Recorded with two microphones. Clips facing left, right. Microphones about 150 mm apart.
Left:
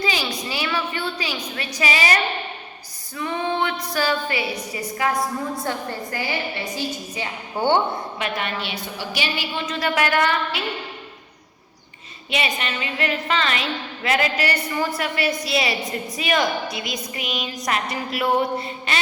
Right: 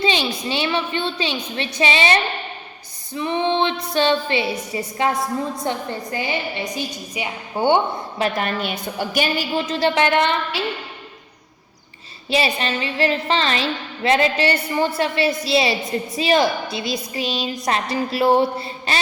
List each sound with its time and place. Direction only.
0.0 s a woman's voice: 25° right (ahead or behind)
8.2 s a woman's voice: 40° right (ahead or behind); by 10.6 s 25° right (ahead or behind)
12.3 s a woman's voice: 30° right (ahead or behind)